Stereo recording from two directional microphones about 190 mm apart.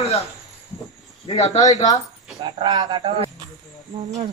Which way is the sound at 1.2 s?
35° left (ahead or behind).